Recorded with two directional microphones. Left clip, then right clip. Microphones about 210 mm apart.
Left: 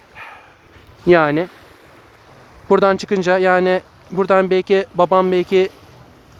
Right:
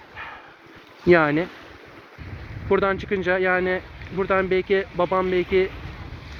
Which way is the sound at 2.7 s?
45° left (ahead or behind).